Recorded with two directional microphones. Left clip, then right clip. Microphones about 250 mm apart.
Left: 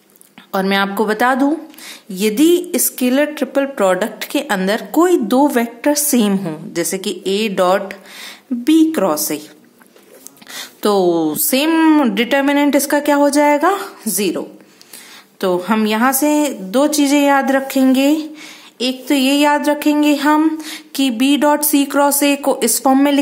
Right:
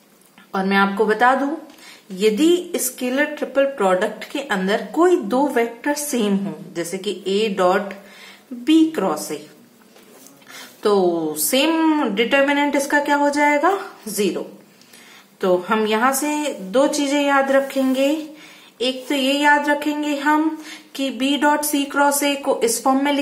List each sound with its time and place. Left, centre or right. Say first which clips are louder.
0.5 s speech: left 2 dB; left
10.5 s speech: left 2 dB; left
15.4 s speech: left 2 dB; left